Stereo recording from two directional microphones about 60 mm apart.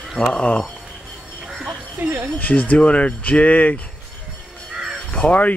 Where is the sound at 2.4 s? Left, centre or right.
Left.